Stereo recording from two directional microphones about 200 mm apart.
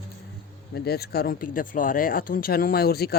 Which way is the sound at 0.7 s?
50° left (ahead or behind).